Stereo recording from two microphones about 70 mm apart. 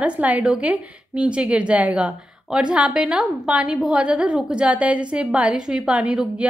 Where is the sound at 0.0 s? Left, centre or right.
Centre.